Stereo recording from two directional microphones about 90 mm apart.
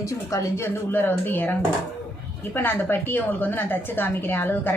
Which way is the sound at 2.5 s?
20° left (ahead or behind).